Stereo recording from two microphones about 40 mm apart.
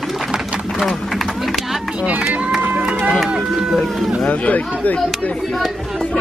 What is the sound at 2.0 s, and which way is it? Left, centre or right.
Speech, right.